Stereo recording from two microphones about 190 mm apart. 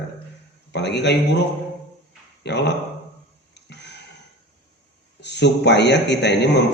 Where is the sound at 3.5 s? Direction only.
65° left (ahead or behind).